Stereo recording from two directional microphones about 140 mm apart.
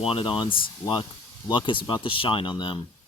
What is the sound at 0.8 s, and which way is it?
Speech, 15° left (ahead or behind).